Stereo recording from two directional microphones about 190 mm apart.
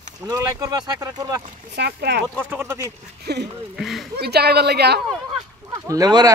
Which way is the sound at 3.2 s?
60° right (ahead or behind).